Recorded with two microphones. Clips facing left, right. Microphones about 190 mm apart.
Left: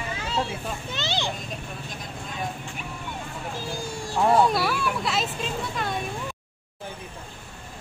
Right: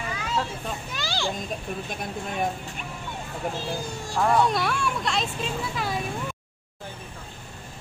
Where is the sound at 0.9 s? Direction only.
20° left (ahead or behind).